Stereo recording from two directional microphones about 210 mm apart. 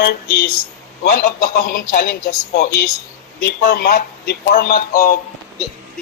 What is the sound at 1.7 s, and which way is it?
Speech, 45° left (ahead or behind).